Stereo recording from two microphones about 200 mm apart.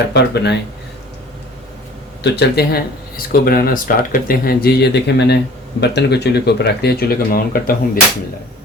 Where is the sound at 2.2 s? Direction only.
55° left (ahead or behind).